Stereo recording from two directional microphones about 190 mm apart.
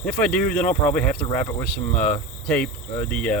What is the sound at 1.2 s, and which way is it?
Speech, 25° left (ahead or behind).